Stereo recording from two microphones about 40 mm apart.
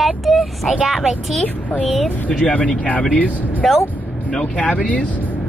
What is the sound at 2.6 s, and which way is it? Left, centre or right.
Speech, left.